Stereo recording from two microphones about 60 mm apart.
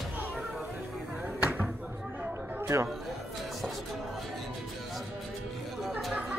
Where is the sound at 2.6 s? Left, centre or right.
Right.